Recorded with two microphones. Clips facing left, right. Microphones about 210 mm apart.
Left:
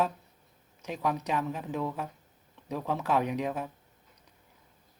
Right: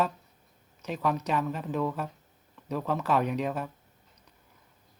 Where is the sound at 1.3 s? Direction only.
15° left (ahead or behind).